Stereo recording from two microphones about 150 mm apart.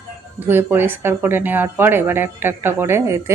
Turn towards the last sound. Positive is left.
turn(degrees=-15)  # may be behind; listen again after turning